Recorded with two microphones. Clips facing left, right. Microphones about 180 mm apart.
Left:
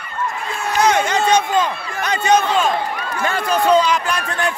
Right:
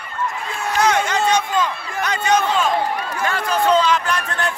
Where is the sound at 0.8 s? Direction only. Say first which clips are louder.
Left 2 dB; 20° left (ahead or behind).